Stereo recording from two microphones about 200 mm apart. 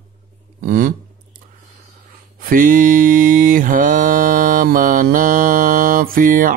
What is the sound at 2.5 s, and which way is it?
Mantra, 40° right (ahead or behind).